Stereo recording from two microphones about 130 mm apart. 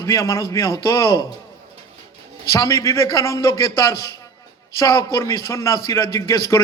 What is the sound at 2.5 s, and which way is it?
A man's voice, 25° left (ahead or behind).